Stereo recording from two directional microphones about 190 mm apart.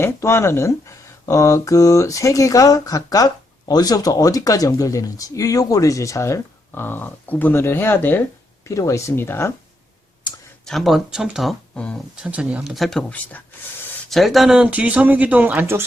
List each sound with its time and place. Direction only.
0.0 s speech: 15° left (ahead or behind)
10.7 s speech: centre (ahead or behind)
12.1 s speech: 5° right (ahead or behind)